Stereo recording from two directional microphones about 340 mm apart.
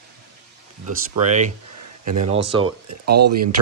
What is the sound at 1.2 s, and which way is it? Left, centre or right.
Speech, right.